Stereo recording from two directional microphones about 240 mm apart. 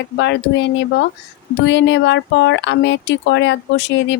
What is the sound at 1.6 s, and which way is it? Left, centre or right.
Speech, left.